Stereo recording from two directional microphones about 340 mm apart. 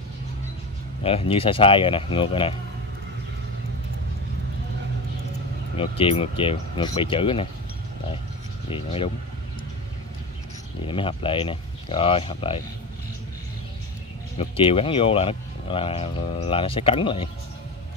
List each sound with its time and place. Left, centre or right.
1.0 s speech: centre
5.8 s speech: centre
8.6 s speech: centre
10.9 s speech: centre
14.4 s speech: centre